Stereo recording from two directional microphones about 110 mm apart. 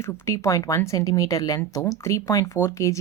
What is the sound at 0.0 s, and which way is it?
Speech, 25° left (ahead or behind).